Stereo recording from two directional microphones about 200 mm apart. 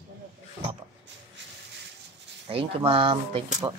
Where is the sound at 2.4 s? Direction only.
30° right (ahead or behind).